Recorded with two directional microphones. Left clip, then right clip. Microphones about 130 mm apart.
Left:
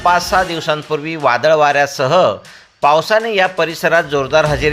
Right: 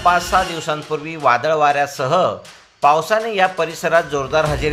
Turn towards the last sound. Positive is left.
turn(degrees=25)  # may be behind; listen again after turning